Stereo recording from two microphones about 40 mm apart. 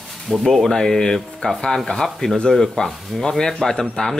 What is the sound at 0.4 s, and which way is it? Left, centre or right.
Speech, centre.